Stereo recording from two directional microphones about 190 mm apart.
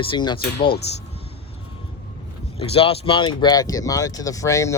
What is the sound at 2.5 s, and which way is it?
Speech, 30° left (ahead or behind).